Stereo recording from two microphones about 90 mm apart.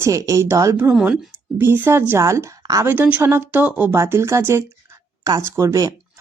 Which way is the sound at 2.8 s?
25° right (ahead or behind).